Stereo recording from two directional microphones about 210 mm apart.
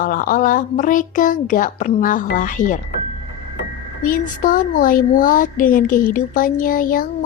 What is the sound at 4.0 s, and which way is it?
A child's voice, 40° left (ahead or behind).